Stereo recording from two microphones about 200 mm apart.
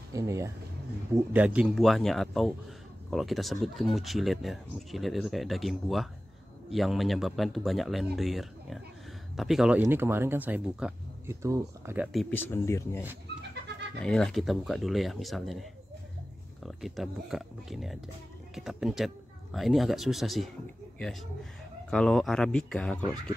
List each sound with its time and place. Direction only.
0.1 s speech: 15° right (ahead or behind)
12.1 s speech: 5° left (ahead or behind)
14.0 s speech: 5° left (ahead or behind)
16.6 s speech: centre (ahead or behind)
21.9 s speech: centre (ahead or behind)